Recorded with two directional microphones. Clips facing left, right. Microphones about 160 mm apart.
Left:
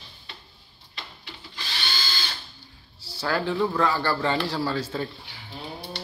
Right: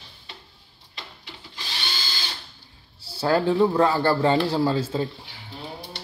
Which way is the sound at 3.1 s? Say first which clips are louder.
Right 6 dB; 25° right (ahead or behind).